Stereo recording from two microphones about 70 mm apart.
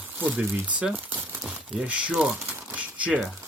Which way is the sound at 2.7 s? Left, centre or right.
Centre.